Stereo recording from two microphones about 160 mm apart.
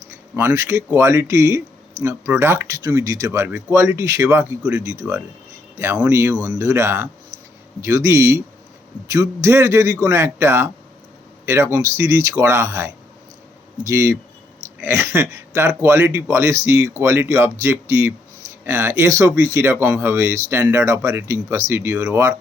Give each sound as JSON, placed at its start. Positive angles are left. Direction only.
{"t": 0.3, "sound": "speech", "side_deg": -15}